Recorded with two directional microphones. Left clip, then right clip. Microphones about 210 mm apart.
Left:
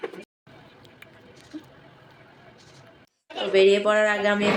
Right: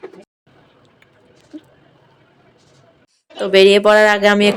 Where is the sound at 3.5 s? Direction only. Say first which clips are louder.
Right 9 dB; 50° right (ahead or behind).